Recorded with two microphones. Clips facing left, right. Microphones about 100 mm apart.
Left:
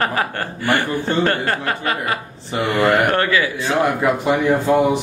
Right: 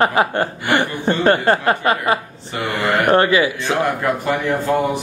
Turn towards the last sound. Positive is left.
turn(degrees=10)  # may be behind; listen again after turning